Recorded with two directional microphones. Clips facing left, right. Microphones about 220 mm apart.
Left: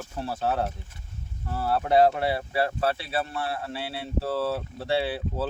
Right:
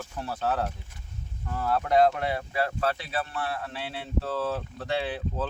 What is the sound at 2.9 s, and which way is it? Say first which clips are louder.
Speech: left 2 dB; 30° left (ahead or behind).